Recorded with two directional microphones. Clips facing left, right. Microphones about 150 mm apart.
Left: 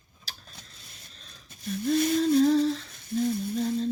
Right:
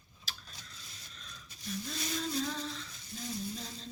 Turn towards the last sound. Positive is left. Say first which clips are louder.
# left 14 dB
turn(degrees=55)  # may be behind; listen again after turning